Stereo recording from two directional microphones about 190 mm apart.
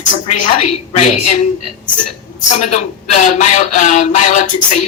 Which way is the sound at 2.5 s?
40° left (ahead or behind).